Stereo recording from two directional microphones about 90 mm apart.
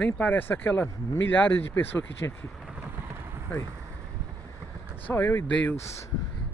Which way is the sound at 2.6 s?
5° right (ahead or behind).